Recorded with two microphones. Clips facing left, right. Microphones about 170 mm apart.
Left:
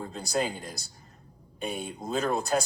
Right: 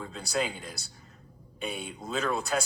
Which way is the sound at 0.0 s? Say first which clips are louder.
Left 2 dB; 40° left (ahead or behind).